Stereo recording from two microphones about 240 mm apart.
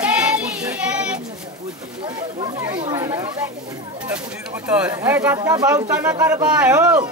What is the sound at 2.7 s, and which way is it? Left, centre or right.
Chatter, centre.